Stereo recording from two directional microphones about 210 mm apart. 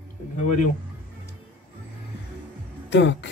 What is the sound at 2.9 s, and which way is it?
Speech, 55° left (ahead or behind).